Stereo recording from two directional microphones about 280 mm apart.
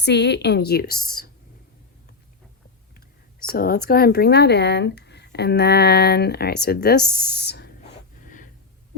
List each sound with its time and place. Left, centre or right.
0.0 s speech: left
3.5 s speech: left